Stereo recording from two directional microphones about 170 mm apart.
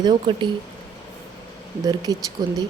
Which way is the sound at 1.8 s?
25° right (ahead or behind).